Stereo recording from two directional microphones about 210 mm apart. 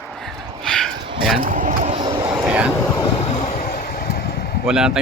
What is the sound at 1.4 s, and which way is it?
Vehicle, 40° right (ahead or behind).